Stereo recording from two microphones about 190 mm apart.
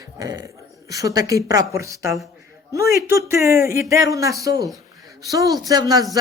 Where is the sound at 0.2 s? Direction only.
20° right (ahead or behind).